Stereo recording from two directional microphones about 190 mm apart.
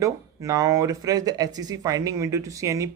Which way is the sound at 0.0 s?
15° right (ahead or behind).